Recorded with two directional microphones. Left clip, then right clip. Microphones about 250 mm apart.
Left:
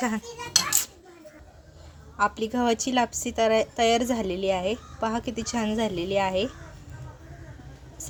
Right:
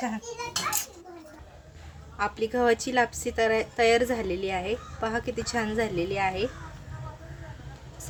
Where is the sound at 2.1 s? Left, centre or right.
Centre.